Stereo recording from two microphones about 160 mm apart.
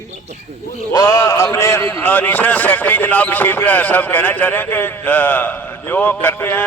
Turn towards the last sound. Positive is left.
turn(degrees=15)  # may be behind; listen again after turning